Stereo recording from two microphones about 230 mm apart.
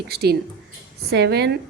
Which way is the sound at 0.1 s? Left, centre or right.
Right.